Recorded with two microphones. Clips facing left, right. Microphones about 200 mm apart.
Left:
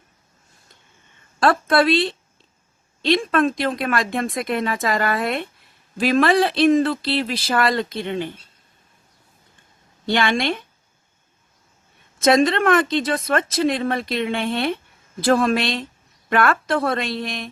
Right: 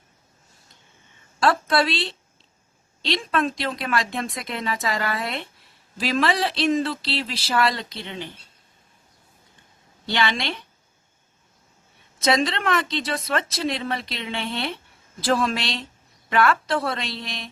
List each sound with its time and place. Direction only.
1.4 s speech: 55° left (ahead or behind)
10.1 s speech: 50° left (ahead or behind)
12.2 s speech: 50° left (ahead or behind)